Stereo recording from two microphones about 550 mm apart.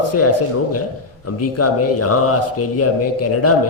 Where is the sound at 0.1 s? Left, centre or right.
Left.